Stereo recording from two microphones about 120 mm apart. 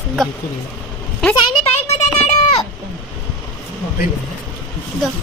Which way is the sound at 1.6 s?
60° left (ahead or behind).